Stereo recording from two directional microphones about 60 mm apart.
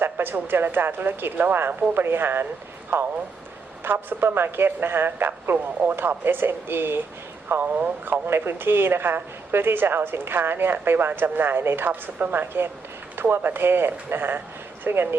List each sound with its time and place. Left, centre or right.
0.0 s speech: right
3.8 s speech: right
11.9 s speech: right